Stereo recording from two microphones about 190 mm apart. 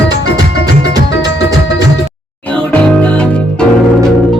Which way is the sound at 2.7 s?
5° left (ahead or behind).